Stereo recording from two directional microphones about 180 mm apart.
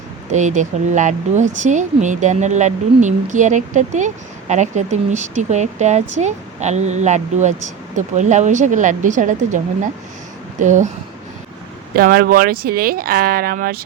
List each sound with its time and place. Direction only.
0.3 s speech: 40° right (ahead or behind)
11.9 s speech: 55° right (ahead or behind)